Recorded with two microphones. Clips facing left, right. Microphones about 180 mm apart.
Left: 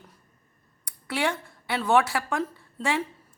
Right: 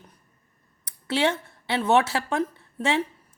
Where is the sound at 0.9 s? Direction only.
25° right (ahead or behind).